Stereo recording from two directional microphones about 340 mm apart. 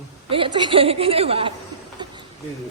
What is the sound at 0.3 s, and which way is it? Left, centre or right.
A woman's voice, centre.